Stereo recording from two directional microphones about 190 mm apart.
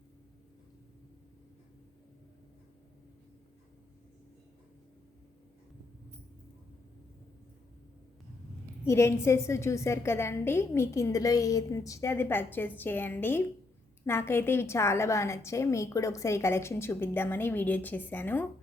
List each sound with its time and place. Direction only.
8.8 s a woman's voice: 15° left (ahead or behind)